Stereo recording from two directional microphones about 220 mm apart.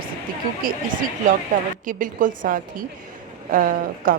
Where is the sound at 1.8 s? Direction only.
35° right (ahead or behind).